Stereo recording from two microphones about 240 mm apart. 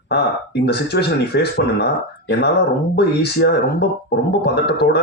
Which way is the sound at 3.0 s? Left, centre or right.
Left.